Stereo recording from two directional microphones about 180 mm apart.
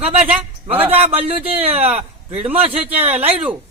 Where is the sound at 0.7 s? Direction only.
10° right (ahead or behind).